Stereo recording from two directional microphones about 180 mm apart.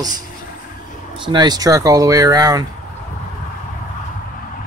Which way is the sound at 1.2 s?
25° right (ahead or behind).